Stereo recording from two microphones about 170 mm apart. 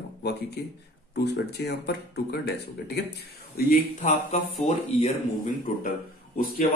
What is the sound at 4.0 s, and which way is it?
Speech, 40° left (ahead or behind).